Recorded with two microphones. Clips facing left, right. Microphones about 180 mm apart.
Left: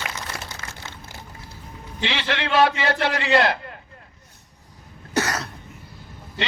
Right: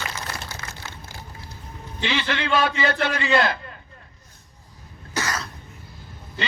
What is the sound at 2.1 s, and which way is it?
A man's voice, 75° left (ahead or behind).